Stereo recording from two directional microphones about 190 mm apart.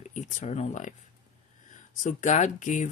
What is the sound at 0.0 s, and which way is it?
Speech, 40° left (ahead or behind).